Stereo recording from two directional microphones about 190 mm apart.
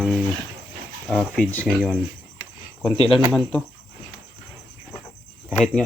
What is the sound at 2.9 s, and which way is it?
Speech, 30° left (ahead or behind).